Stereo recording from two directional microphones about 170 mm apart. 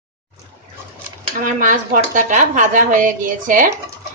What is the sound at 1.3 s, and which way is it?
Speech, 50° right (ahead or behind).